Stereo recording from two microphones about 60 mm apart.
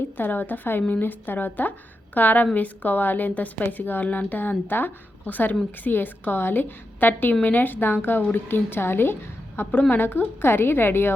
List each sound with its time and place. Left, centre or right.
0.2 s a woman's voice: left